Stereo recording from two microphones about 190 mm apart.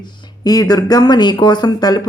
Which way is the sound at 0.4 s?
20° left (ahead or behind).